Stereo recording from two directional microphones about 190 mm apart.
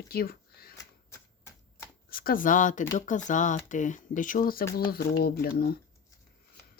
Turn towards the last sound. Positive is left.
turn(degrees=55)  # may be behind; listen again after turning